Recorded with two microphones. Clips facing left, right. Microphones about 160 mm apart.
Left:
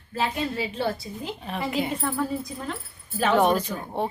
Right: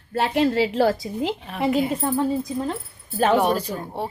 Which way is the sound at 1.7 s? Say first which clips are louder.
Right 7 dB; centre (ahead or behind).